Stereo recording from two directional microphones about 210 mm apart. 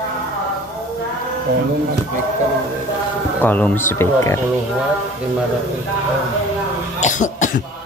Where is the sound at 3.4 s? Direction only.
10° left (ahead or behind).